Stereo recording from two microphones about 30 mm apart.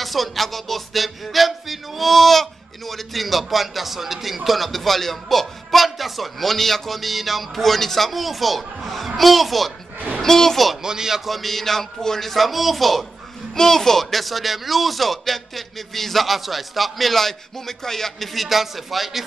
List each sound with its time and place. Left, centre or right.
0.0 s music: centre
4.5 s a man's voice: centre
7.5 s speech: centre
9.9 s a sound: right
10.2 s speech: centre
10.8 s speech: right
11.2 s speech: centre
13.6 s speech: centre
14.1 s speech: centre
18.2 s speech: centre